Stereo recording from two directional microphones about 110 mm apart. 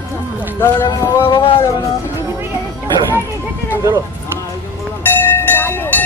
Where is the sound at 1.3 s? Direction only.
50° left (ahead or behind).